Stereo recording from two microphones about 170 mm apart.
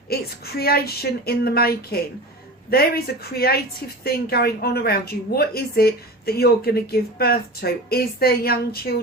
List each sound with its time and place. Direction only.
0.1 s a woman's voice: 65° left (ahead or behind)